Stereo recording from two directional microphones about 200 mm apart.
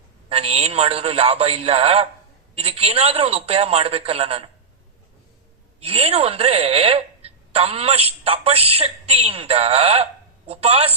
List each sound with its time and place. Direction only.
0.3 s a woman's voice: 30° right (ahead or behind)
5.8 s a woman's voice: 30° right (ahead or behind)